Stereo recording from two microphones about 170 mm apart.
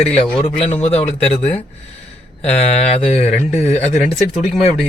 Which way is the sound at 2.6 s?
40° left (ahead or behind).